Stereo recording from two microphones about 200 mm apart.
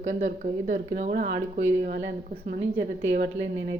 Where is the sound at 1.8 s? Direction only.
50° right (ahead or behind).